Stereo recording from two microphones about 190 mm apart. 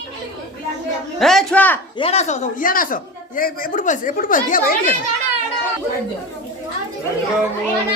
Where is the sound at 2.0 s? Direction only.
35° left (ahead or behind).